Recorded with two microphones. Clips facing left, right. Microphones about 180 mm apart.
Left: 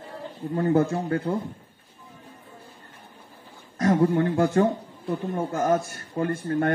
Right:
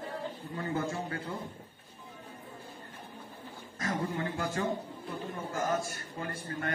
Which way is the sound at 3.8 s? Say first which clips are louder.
Left 13 dB; 50° left (ahead or behind).